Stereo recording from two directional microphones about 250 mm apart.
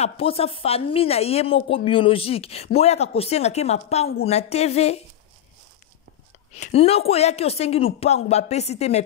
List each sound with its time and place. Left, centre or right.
0.0 s speech: left
6.5 s speech: left